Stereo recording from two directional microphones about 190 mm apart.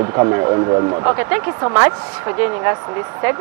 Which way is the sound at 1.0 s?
10° right (ahead or behind).